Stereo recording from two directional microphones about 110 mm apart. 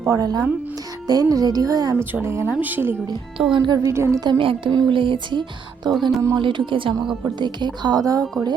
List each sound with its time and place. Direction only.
0.1 s speech: 35° right (ahead or behind); by 2.9 s 15° right (ahead or behind)
3.4 s speech: 35° right (ahead or behind)
4.2 s speech: 45° right (ahead or behind)
5.9 s speech: centre (ahead or behind)
6.3 s speech: 45° right (ahead or behind)